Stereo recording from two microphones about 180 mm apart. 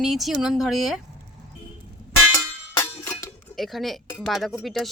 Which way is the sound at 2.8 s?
15° left (ahead or behind).